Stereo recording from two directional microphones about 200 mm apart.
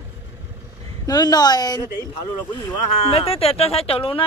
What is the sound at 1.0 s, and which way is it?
Speech, 20° left (ahead or behind).